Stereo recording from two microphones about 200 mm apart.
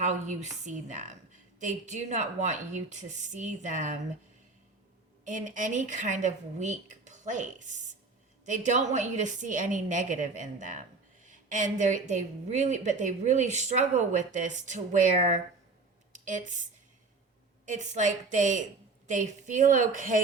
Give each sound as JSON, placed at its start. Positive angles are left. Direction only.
{"t": 0.0, "sound": "a woman's voice", "side_deg": -35}
{"t": 5.2, "sound": "a woman's voice", "side_deg": -40}
{"t": 17.7, "sound": "a woman's voice", "side_deg": -35}